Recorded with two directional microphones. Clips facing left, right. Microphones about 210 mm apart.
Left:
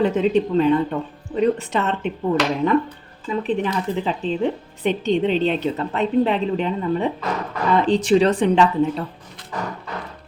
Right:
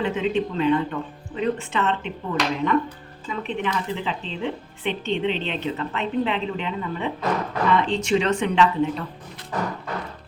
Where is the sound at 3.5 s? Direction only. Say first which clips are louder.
Left 3 dB; 40° left (ahead or behind).